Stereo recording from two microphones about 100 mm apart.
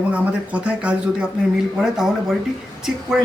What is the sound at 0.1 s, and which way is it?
Speech, 15° right (ahead or behind).